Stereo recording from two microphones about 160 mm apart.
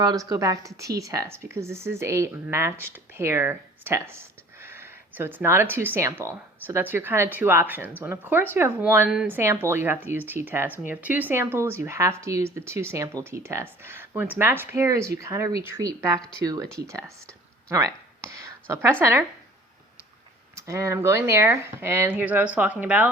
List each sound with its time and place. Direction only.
0.0 s a woman's voice: 25° right (ahead or behind)
20.6 s a woman's voice: 20° right (ahead or behind)